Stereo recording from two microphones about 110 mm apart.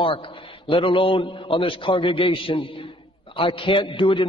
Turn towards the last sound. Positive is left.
turn(degrees=50)  # may be behind; listen again after turning